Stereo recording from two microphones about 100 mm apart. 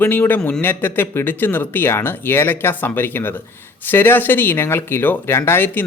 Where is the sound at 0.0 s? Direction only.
20° left (ahead or behind).